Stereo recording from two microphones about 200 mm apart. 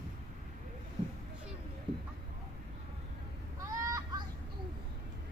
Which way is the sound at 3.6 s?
15° right (ahead or behind).